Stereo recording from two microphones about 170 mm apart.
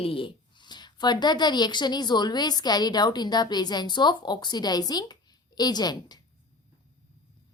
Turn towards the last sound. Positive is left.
turn(degrees=25)  # may be behind; listen again after turning